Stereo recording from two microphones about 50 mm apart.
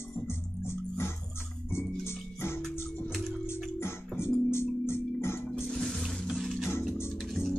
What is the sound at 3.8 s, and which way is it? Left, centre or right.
Organ, left.